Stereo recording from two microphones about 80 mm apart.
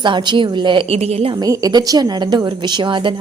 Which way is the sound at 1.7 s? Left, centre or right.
Right.